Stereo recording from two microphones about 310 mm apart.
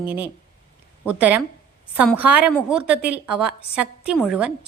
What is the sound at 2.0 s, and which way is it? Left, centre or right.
A woman's voice, centre.